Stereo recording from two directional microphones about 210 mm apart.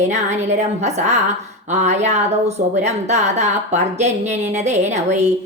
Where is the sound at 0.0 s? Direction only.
35° right (ahead or behind).